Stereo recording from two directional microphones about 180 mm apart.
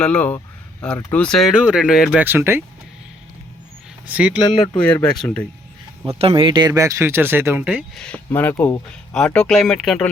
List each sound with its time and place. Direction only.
0.0 s speech: 5° left (ahead or behind); by 2.6 s 15° right (ahead or behind)
4.1 s speech: 5° right (ahead or behind)
4.8 s speech: 10° left (ahead or behind)
6.1 s speech: 30° right (ahead or behind); by 8.0 s 5° right (ahead or behind)
8.0 s speech: 10° left (ahead or behind)